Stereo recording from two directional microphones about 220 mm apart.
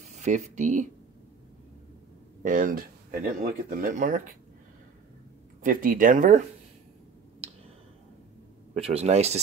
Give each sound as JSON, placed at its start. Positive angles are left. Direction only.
{"t": 0.0, "sound": "speech", "side_deg": -30}
{"t": 2.4, "sound": "speech", "side_deg": -40}
{"t": 5.6, "sound": "speech", "side_deg": -40}
{"t": 8.7, "sound": "speech", "side_deg": -25}